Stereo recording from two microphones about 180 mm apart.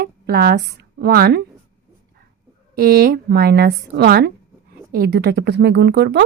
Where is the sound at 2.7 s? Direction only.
60° right (ahead or behind).